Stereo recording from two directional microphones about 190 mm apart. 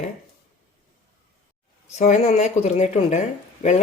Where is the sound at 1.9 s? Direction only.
40° left (ahead or behind).